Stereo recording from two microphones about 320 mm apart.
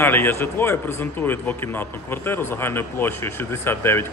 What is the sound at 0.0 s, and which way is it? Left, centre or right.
A man's voice, centre.